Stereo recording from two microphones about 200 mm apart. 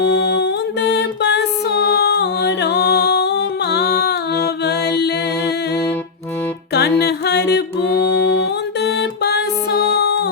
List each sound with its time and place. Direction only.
0.0 s music: 60° left (ahead or behind)
6.7 s music: 55° left (ahead or behind)